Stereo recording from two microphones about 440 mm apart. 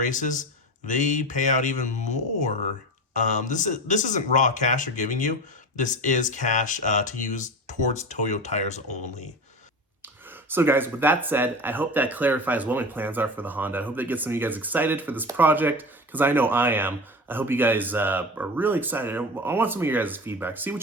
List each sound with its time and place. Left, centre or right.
0.0 s speech: centre
10.0 s speech: centre